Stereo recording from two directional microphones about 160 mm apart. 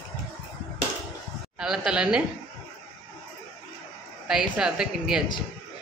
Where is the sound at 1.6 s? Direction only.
5° right (ahead or behind).